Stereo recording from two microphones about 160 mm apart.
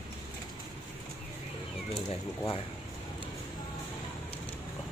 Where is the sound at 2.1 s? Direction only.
35° left (ahead or behind).